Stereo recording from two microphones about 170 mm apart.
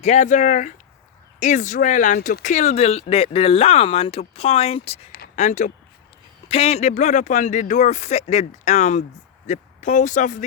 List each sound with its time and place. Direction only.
0.0 s speech: 45° left (ahead or behind)